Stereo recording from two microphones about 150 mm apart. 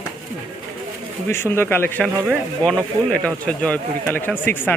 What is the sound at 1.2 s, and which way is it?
Speech, 15° left (ahead or behind).